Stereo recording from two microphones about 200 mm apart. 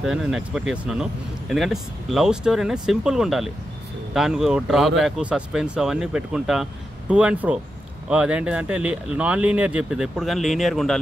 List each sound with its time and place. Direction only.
0.0 s speech: 5° right (ahead or behind)